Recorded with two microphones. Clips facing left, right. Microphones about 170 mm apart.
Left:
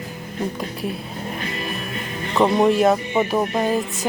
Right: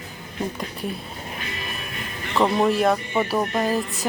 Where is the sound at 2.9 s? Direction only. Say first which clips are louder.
Left 3 dB; 20° left (ahead or behind).